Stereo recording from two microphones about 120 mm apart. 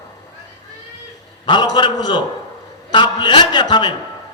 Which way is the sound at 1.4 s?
40° left (ahead or behind).